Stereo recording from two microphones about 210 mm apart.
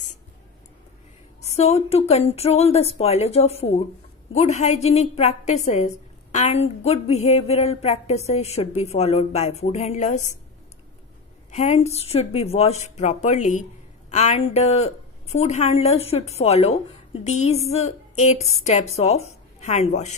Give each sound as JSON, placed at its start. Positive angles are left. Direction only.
{"t": 1.4, "sound": "a woman's voice", "side_deg": 30}
{"t": 11.5, "sound": "a woman's voice", "side_deg": 30}